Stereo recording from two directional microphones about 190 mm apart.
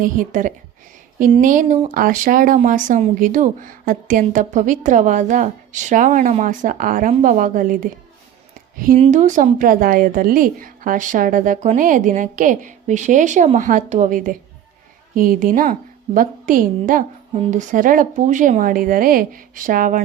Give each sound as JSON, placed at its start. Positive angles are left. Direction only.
{"t": 0.0, "sound": "speech", "side_deg": -45}
{"t": 9.0, "sound": "a woman's voice", "side_deg": -40}
{"t": 17.3, "sound": "speech", "side_deg": -35}